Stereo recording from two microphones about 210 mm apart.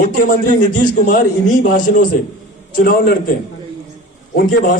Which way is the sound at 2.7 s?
45° left (ahead or behind).